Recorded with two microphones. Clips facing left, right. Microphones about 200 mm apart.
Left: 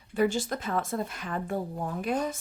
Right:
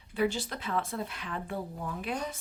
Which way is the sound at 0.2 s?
45° left (ahead or behind).